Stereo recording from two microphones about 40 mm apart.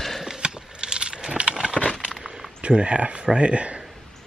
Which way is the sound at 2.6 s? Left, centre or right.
Right.